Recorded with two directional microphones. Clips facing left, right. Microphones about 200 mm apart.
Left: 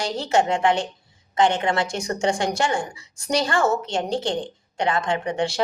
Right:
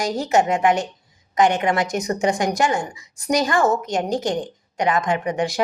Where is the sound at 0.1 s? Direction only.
40° right (ahead or behind).